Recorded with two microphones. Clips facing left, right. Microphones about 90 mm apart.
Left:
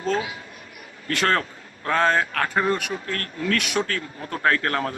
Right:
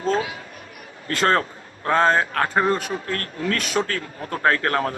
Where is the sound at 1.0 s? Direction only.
30° right (ahead or behind).